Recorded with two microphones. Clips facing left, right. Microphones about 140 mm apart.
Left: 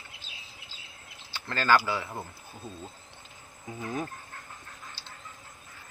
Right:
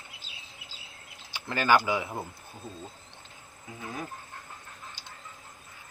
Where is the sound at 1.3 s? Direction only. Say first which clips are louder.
Right 1 dB; 15° right (ahead or behind).